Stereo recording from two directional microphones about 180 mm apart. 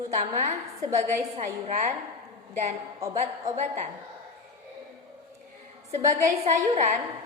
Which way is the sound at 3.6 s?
40° right (ahead or behind).